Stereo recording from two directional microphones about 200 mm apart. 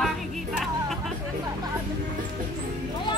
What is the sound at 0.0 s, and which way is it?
Music, centre (ahead or behind).